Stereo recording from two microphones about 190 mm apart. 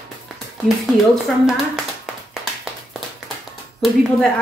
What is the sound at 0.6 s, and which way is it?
Speech, centre (ahead or behind).